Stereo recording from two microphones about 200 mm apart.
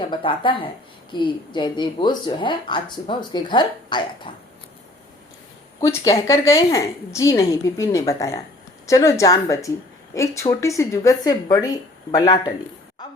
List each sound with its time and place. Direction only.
0.0 s speech: 25° left (ahead or behind)
5.8 s a woman's voice: 15° left (ahead or behind)
13.0 s a sound: 20° left (ahead or behind)